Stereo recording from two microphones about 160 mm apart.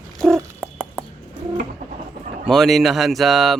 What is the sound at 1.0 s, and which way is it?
Bird, 5° left (ahead or behind).